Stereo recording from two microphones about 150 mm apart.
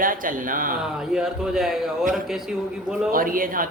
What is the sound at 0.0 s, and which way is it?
Speech, 65° right (ahead or behind).